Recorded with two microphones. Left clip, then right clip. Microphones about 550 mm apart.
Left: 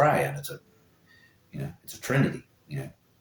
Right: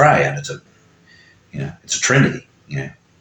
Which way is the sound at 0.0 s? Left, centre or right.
Left.